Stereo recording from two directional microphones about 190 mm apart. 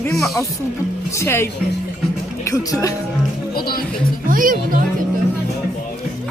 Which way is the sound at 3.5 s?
50° left (ahead or behind).